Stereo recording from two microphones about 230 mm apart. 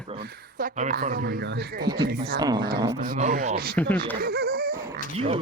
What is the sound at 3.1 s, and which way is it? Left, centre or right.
A man's voice, right.